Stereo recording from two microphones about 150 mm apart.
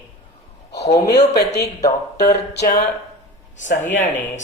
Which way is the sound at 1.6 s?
20° left (ahead or behind).